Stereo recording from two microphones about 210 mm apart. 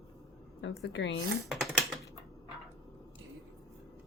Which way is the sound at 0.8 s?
55° left (ahead or behind).